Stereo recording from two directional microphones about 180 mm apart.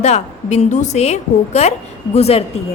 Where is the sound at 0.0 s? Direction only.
40° left (ahead or behind).